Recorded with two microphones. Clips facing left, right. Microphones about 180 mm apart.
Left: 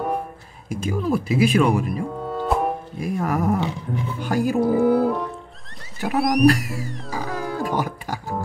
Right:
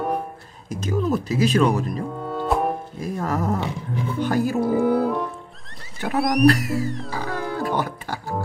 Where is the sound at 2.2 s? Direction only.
Centre (ahead or behind).